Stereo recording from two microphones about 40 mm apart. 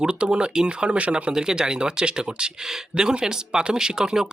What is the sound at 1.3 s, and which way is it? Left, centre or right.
Speech, centre.